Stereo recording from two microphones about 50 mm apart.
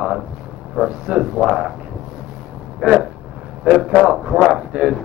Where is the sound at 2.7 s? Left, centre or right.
Centre.